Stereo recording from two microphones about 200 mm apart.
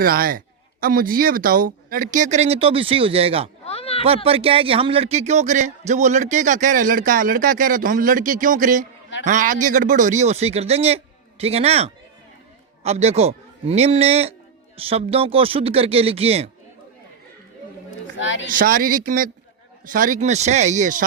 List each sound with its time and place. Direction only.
0.0 s speech: 45° right (ahead or behind); by 3.5 s 30° right (ahead or behind)
3.6 s a sound: 30° left (ahead or behind)
4.0 s a man's voice: 30° right (ahead or behind)
18.2 s speech: 65° left (ahead or behind)
18.4 s speech: 45° right (ahead or behind)